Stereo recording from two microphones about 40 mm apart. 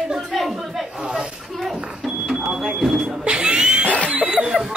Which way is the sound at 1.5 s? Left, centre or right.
Centre.